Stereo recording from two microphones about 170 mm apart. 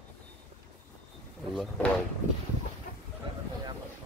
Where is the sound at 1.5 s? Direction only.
Centre (ahead or behind).